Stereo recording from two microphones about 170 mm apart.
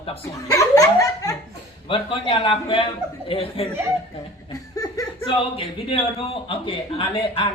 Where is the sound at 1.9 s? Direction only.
30° left (ahead or behind).